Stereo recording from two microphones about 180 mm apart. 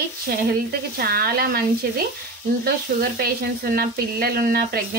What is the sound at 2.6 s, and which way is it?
Sizzle, 60° right (ahead or behind).